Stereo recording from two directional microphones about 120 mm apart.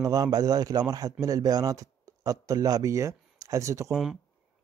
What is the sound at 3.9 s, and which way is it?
Speech, centre (ahead or behind).